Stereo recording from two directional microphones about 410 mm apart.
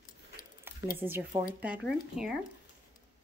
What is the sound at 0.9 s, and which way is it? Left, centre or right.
Speech, centre.